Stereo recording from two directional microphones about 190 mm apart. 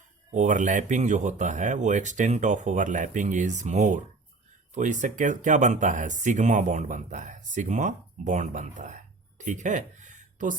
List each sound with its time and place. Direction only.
0.3 s speech: 40° right (ahead or behind)